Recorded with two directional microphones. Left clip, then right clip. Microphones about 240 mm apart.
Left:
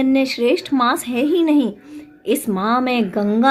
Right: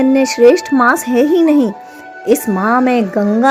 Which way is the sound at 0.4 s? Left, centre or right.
Right.